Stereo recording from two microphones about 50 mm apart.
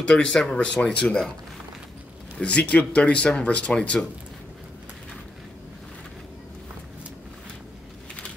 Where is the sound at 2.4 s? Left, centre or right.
Left.